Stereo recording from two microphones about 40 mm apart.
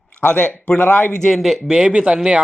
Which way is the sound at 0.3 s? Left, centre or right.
Left.